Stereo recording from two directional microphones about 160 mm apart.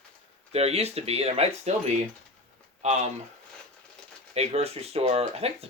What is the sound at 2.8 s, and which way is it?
Speech, 45° right (ahead or behind).